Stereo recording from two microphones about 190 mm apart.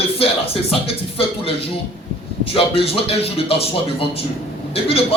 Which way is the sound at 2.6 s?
30° left (ahead or behind).